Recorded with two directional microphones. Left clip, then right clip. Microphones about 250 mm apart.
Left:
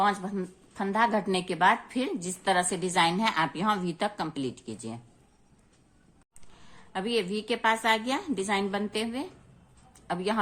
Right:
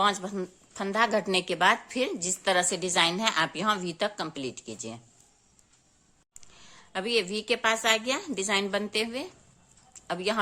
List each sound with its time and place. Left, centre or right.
0.0 s a woman's voice: right
6.4 s a woman's voice: right
9.9 s a sound: right